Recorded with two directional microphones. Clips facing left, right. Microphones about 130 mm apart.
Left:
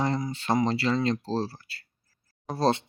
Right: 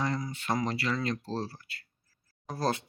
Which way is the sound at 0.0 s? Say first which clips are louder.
Left 4 dB; 30° left (ahead or behind).